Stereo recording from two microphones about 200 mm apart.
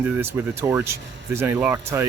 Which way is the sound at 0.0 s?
10° right (ahead or behind).